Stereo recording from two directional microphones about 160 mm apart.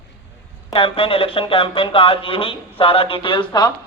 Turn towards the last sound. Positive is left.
turn(degrees=25)  # may be behind; listen again after turning